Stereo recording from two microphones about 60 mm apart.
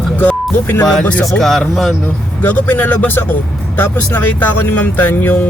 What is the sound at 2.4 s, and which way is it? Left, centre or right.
Speech, left.